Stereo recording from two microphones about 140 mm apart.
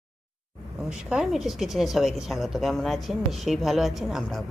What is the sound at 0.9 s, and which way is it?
A woman's voice, 5° right (ahead or behind).